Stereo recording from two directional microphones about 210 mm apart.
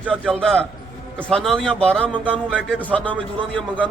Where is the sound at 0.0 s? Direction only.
5° left (ahead or behind).